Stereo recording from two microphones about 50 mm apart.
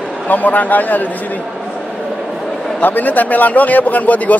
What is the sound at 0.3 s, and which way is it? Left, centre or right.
A man's voice, left.